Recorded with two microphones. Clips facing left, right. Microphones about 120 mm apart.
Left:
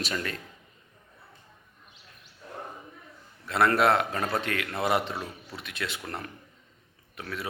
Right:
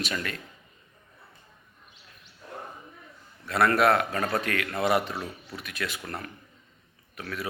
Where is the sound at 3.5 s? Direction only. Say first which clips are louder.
Right 1 dB; 20° left (ahead or behind).